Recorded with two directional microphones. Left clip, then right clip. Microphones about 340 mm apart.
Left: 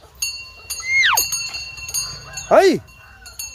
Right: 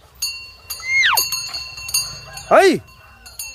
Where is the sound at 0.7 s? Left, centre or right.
Centre.